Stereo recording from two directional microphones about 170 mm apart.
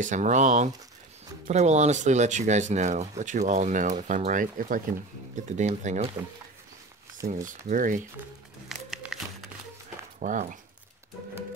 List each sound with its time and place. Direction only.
0.0 s speech: 45° right (ahead or behind)
5.6 s speech: 40° right (ahead or behind)
7.4 s speech: 50° right (ahead or behind)
8.6 s music: centre (ahead or behind)
10.2 s speech: 50° right (ahead or behind)